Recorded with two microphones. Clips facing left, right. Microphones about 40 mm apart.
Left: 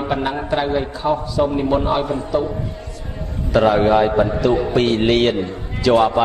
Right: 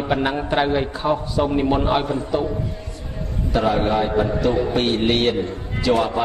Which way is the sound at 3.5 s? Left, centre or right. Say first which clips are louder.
Left 5 dB; left.